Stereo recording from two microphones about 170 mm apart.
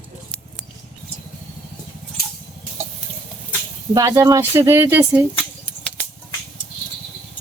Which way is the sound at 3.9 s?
20° right (ahead or behind).